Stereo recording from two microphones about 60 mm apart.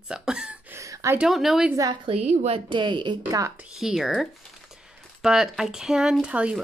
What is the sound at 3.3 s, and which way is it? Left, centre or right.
Speech, right.